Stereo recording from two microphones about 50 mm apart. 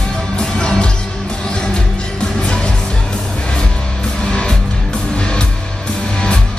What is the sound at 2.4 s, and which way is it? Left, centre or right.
Music, centre.